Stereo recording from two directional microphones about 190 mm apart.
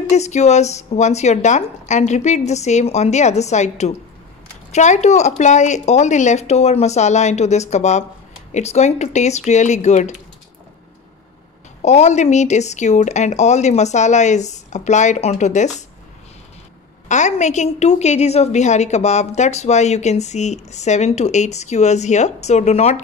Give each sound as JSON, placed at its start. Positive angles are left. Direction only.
{"t": 0.1, "sound": "a woman's voice", "side_deg": 35}
{"t": 11.8, "sound": "a woman's voice", "side_deg": 35}
{"t": 17.1, "sound": "a woman's voice", "side_deg": 40}